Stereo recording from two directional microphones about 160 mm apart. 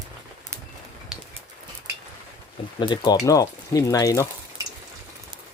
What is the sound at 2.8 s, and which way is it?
Speech, 25° left (ahead or behind).